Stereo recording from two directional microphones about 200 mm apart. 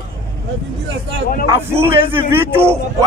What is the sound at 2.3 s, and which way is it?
Speech, 10° right (ahead or behind).